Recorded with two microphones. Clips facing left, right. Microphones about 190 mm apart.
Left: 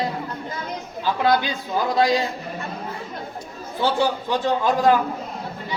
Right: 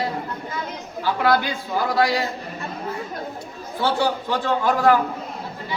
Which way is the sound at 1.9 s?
20° left (ahead or behind).